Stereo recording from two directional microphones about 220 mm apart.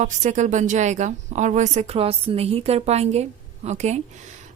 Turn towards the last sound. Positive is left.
turn(degrees=-30)  # may be behind; listen again after turning